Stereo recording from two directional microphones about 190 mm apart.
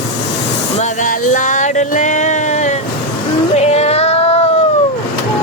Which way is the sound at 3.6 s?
35° left (ahead or behind).